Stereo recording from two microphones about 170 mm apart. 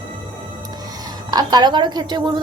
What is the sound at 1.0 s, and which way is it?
A woman's voice, 25° right (ahead or behind).